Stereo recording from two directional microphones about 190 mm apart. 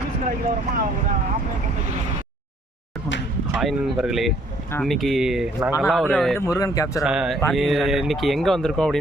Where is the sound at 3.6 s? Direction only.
Centre (ahead or behind).